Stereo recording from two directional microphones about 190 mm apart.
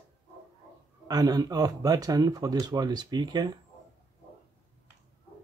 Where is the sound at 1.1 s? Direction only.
20° right (ahead or behind).